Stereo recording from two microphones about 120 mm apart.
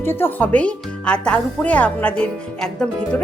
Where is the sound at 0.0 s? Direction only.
20° left (ahead or behind).